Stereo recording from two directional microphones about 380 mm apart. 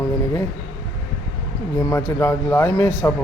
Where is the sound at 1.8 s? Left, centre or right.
Centre.